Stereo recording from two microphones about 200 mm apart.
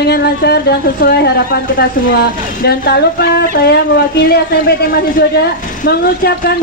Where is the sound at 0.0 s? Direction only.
55° left (ahead or behind).